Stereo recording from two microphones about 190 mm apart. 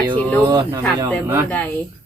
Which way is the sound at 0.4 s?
20° right (ahead or behind).